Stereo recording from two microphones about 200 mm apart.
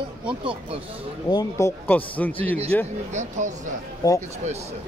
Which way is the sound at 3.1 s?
35° right (ahead or behind).